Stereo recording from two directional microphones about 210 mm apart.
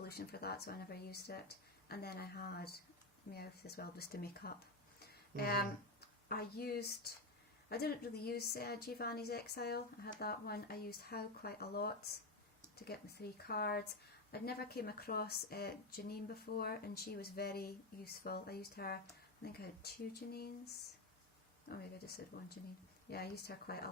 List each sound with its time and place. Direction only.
0.0 s a woman's voice: 50° left (ahead or behind)
4.9 s a sound: 45° left (ahead or behind)
6.2 s a woman's voice: 50° left (ahead or behind)
21.7 s a woman's voice: 50° left (ahead or behind)